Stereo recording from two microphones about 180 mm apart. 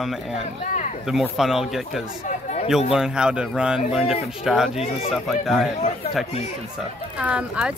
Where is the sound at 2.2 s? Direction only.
40° left (ahead or behind).